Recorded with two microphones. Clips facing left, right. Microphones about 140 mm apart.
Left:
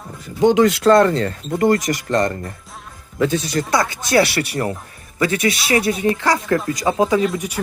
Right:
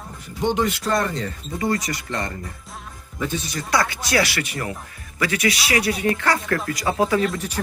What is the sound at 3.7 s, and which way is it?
Speech, 20° left (ahead or behind).